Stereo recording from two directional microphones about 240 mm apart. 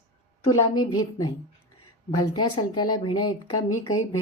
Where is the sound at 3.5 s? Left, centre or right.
Left.